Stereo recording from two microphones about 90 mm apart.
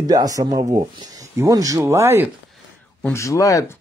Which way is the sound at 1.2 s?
35° right (ahead or behind).